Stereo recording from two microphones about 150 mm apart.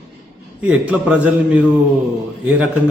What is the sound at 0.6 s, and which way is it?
A man's voice, 10° right (ahead or behind).